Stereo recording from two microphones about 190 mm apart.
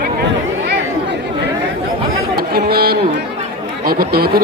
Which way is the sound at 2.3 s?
55° right (ahead or behind).